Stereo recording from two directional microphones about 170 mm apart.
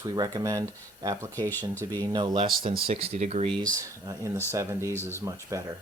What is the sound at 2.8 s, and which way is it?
Speech, 35° right (ahead or behind).